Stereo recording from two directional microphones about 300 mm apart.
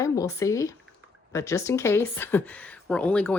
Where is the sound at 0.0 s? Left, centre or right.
Centre.